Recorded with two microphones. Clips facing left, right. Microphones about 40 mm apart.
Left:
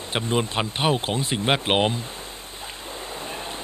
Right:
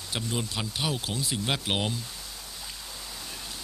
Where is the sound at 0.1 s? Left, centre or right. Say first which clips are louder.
Left 8 dB; left.